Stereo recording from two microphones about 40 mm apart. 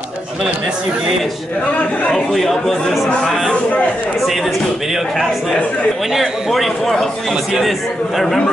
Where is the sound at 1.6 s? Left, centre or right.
Left.